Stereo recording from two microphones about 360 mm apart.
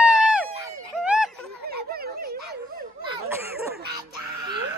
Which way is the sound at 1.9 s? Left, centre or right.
Right.